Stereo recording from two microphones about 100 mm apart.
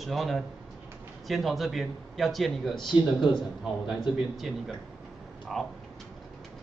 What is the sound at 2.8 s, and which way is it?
Speech, 50° left (ahead or behind).